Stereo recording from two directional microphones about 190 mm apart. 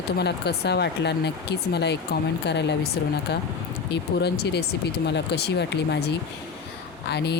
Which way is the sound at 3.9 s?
60° left (ahead or behind).